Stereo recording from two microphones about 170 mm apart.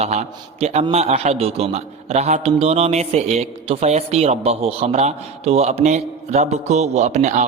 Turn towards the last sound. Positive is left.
turn(degrees=-45)  # may be behind; listen again after turning